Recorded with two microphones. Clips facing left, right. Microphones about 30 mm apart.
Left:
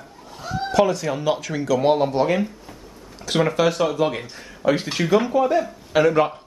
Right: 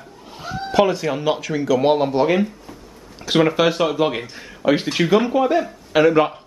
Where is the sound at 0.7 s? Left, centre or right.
Right.